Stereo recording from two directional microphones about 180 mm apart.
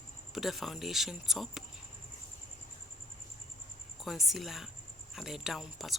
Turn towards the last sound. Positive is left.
turn(degrees=0)  # may be behind; listen again after turning